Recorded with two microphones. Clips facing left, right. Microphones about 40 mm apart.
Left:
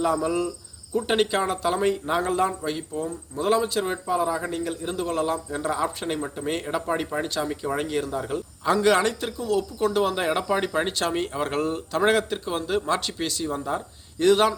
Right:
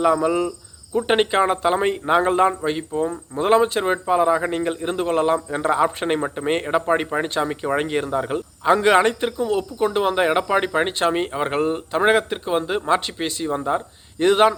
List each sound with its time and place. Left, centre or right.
0.0 s a man's voice: right